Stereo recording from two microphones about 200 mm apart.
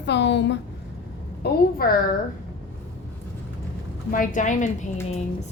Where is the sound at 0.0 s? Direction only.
60° left (ahead or behind).